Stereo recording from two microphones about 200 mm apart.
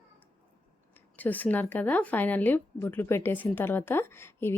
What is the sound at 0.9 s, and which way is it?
Speech, 10° left (ahead or behind).